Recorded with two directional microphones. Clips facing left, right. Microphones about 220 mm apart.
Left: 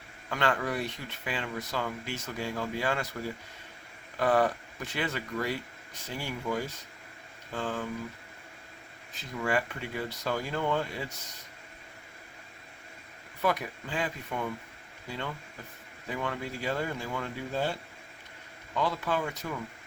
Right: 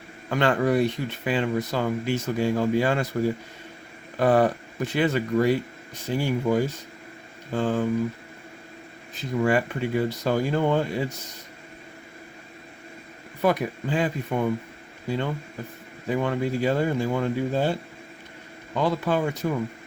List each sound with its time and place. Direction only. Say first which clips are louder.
0.3 s speech: right 8 dB; 25° right (ahead or behind)
9.3 s speech: right 8 dB; 25° right (ahead or behind)
13.4 s speech: right 7 dB; 20° right (ahead or behind)
18.8 s speech: right 7 dB; 25° right (ahead or behind)